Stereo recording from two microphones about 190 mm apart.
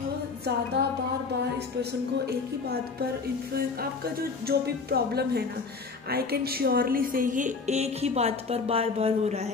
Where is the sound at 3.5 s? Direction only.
55° right (ahead or behind); by 9.5 s 35° right (ahead or behind).